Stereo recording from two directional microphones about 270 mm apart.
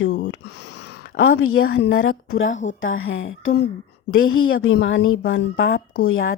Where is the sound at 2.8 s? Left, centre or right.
Left.